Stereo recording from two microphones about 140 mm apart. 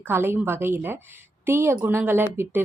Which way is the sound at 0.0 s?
15° right (ahead or behind).